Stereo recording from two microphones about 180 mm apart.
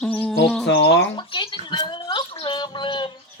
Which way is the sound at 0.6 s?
70° left (ahead or behind).